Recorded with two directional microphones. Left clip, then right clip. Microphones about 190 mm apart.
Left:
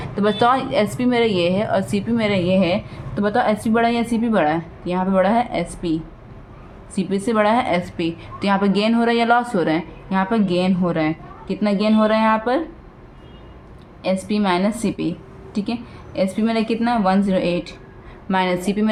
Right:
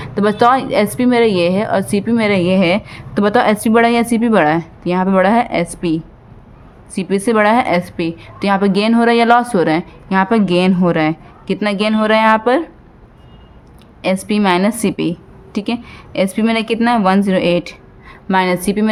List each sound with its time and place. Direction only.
0.0 s a woman's voice: 30° right (ahead or behind)
14.0 s a woman's voice: 35° right (ahead or behind)